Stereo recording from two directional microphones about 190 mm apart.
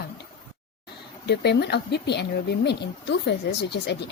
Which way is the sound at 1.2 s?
60° left (ahead or behind).